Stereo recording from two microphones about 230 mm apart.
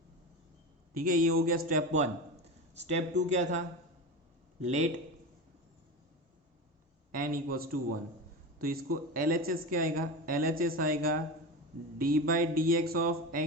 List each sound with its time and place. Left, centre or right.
0.9 s speech: right
2.4 s a sound: right
3.2 s speech: right
4.6 s speech: right
7.1 s speech: right
11.9 s speech: right